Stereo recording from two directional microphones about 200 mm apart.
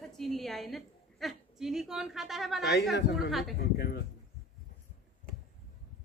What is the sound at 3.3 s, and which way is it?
Speech, centre (ahead or behind).